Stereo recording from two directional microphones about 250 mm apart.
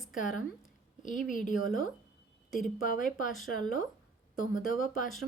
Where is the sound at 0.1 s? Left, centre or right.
Left.